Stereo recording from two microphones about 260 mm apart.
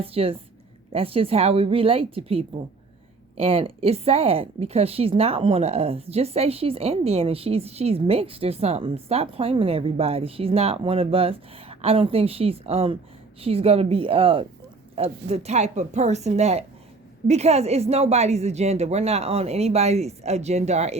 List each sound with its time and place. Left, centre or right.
0.0 s speech: right